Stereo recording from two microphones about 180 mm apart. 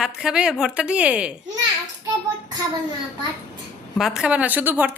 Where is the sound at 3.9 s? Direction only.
Centre (ahead or behind).